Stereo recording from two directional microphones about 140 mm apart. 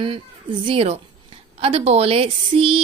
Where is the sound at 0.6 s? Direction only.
45° right (ahead or behind).